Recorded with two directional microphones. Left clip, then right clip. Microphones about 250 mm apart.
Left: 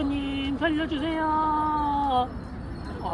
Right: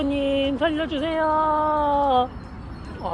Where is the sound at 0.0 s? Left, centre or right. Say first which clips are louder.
Right 7 dB; right.